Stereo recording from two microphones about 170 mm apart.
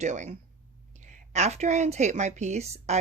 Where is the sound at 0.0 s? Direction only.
45° right (ahead or behind).